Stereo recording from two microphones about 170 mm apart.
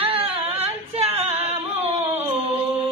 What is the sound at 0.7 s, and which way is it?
Singing, 35° right (ahead or behind).